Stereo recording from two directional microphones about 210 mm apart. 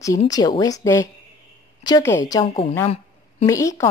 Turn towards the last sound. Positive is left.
turn(degrees=15)  # may be behind; listen again after turning